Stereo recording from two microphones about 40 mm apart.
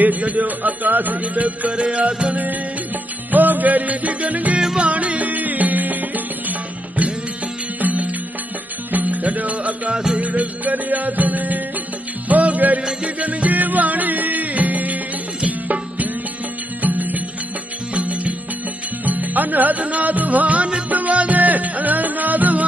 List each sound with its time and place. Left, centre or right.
0.0 s speech: right
1.7 s music: right
3.3 s speech: right
4.7 s music: right
7.8 s music: right
10.1 s speech: right
12.3 s music: right